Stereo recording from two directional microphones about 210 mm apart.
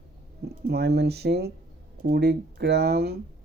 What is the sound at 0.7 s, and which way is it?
Speech, 50° right (ahead or behind).